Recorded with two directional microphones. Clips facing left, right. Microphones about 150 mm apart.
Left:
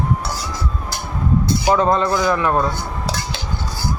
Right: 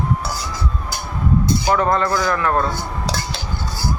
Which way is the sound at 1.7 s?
20° left (ahead or behind).